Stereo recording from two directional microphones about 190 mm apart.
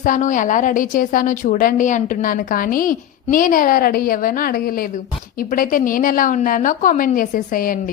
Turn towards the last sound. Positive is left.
turn(degrees=50)  # may be behind; listen again after turning